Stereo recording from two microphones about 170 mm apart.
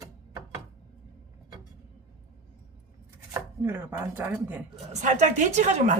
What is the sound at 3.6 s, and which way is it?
Speech, 15° right (ahead or behind).